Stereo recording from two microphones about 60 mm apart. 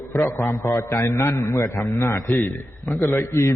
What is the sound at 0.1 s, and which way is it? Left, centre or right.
A man's voice, left.